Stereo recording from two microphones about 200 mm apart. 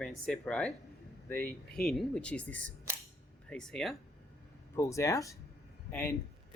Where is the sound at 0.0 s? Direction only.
Centre (ahead or behind).